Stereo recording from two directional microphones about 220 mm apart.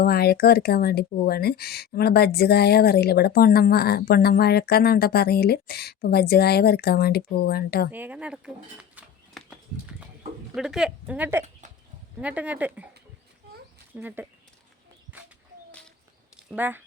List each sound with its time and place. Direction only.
0.0 s speech: 45° left (ahead or behind)
7.9 s a sound: 10° right (ahead or behind)
10.5 s speech: centre (ahead or behind)
13.9 s speech: 10° right (ahead or behind)
16.5 s speech: 10° right (ahead or behind)